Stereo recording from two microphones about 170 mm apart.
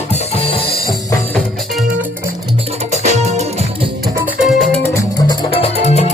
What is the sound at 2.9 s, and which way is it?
Music, 40° right (ahead or behind).